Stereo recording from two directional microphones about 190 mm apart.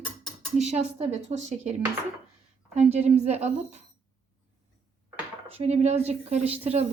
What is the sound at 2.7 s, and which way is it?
A woman's voice, 35° right (ahead or behind).